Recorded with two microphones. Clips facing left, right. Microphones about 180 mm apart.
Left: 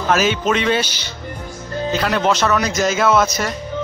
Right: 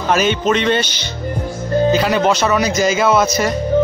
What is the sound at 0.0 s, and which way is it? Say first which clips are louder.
A man's voice: right 2 dB; centre (ahead or behind).